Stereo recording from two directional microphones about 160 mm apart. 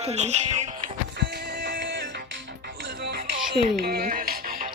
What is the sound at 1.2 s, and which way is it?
Music, 90° right.